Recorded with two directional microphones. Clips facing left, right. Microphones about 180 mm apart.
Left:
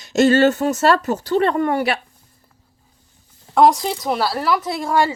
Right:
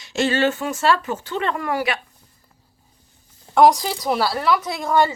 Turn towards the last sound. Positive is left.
turn(degrees=10)  # may be behind; listen again after turning